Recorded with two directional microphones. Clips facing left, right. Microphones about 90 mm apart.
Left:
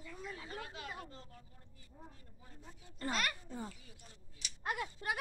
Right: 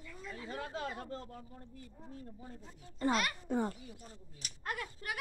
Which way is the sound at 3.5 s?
65° right (ahead or behind).